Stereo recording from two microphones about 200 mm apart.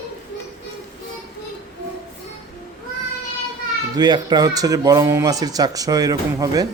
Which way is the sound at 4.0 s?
20° right (ahead or behind).